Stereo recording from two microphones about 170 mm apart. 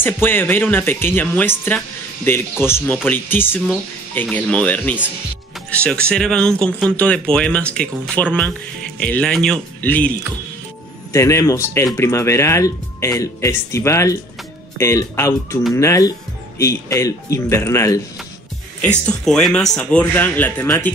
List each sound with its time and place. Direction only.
0.0 s speech: 10° left (ahead or behind)
11.1 s speech: 20° left (ahead or behind)
19.0 s speech: 5° left (ahead or behind)